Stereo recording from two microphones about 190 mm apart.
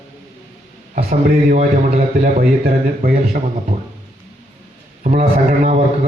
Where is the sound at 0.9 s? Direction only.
40° right (ahead or behind).